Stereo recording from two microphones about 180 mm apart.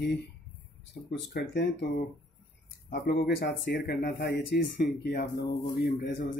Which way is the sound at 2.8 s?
60° left (ahead or behind).